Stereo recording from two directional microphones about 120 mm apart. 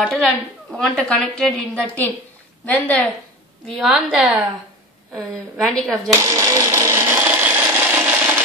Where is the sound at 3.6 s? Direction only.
Centre (ahead or behind).